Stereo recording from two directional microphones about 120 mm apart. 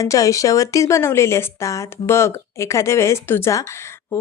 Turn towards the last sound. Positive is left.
turn(degrees=20)  # may be behind; listen again after turning